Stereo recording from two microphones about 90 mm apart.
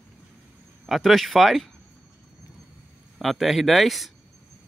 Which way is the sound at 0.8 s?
Centre (ahead or behind).